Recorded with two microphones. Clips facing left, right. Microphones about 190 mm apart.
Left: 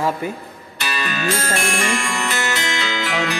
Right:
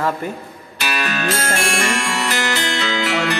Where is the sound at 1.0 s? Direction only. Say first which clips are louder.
Right 1 dB; 85° right.